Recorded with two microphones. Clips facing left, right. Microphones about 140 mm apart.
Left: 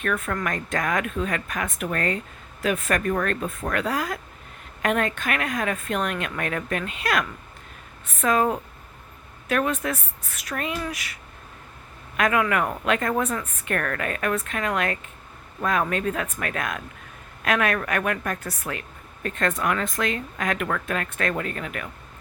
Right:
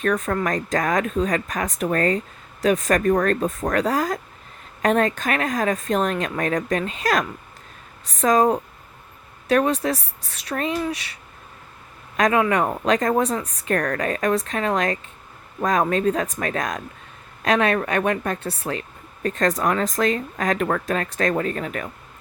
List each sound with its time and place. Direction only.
0.0 s speech: 35° right (ahead or behind)